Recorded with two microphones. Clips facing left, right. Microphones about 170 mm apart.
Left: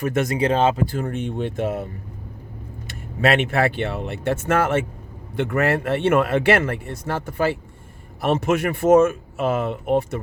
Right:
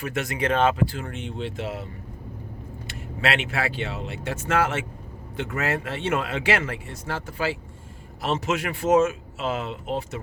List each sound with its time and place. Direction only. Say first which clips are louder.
0.0 s speech: left 7 dB; 45° left (ahead or behind)
0.3 s speech: left 1 dB; 30° left (ahead or behind)
0.8 s speech: left 4 dB; 45° left (ahead or behind)
3.2 s speech: left 7 dB; 45° left (ahead or behind)